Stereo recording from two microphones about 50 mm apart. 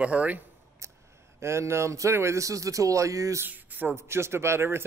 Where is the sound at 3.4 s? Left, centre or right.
Right.